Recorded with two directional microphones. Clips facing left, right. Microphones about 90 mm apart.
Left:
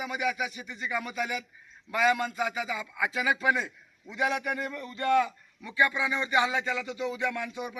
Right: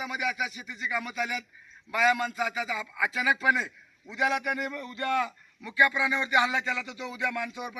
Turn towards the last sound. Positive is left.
turn(degrees=25)  # may be behind; listen again after turning